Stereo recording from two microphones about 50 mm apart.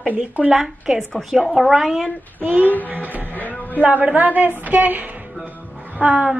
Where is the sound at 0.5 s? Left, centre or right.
Centre.